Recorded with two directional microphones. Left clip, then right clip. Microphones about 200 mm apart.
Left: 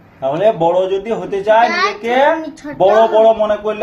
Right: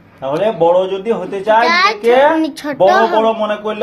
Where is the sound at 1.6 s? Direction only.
45° right (ahead or behind).